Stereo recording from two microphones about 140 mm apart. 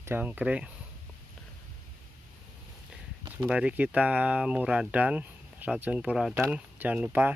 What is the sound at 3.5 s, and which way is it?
Speech, 10° right (ahead or behind).